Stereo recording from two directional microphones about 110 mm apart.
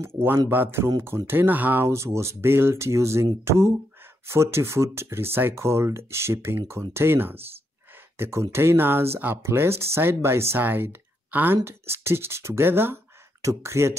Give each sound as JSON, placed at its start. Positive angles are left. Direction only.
{"t": 0.0, "sound": "speech", "side_deg": -20}